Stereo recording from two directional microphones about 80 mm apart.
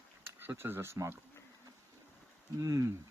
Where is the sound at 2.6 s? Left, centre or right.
Right.